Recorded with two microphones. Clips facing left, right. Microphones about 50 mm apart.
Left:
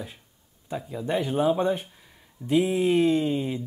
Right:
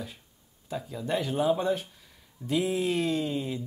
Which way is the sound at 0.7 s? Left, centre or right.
Centre.